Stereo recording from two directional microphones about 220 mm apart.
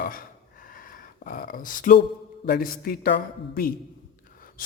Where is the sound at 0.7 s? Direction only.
40° left (ahead or behind).